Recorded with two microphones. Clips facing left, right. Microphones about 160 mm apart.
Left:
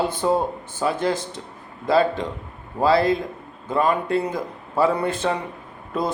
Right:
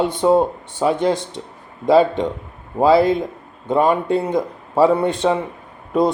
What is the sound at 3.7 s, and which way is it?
A man's voice, 25° right (ahead or behind).